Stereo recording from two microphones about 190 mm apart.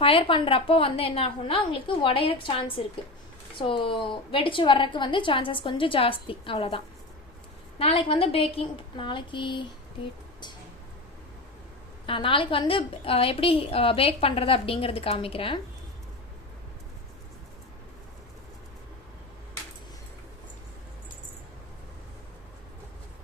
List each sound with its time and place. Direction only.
0.0 s a woman's voice: 30° left (ahead or behind)
12.0 s a woman's voice: 25° left (ahead or behind)